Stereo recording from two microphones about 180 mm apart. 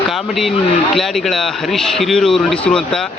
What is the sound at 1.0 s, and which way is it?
A man's voice, centre (ahead or behind).